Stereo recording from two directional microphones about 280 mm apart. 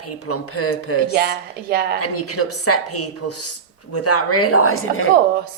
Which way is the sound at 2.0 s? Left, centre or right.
Left.